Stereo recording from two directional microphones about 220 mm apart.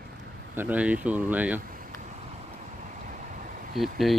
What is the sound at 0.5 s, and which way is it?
Speech, 5° right (ahead or behind).